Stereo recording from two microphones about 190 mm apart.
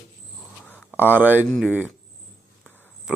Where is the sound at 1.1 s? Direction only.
10° right (ahead or behind).